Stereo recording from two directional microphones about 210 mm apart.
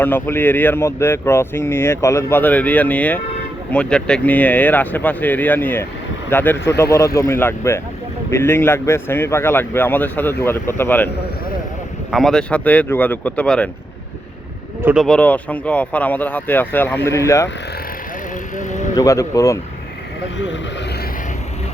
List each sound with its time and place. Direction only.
0.0 s speech: 10° left (ahead or behind)
12.1 s speech: centre (ahead or behind)
14.8 s speech: 10° right (ahead or behind)
15.0 s speech: 5° left (ahead or behind)
18.5 s vehicle: 35° left (ahead or behind)
18.9 s speech: 15° left (ahead or behind)